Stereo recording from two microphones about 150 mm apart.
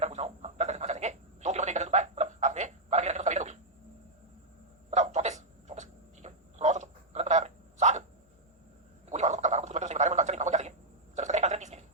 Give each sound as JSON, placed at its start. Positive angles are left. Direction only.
{"t": 0.0, "sound": "telephone", "side_deg": -50}
{"t": 4.9, "sound": "a sound", "side_deg": -50}
{"t": 9.0, "sound": "gargling", "side_deg": -50}